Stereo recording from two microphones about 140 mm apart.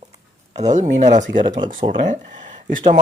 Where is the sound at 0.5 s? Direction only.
55° right (ahead or behind).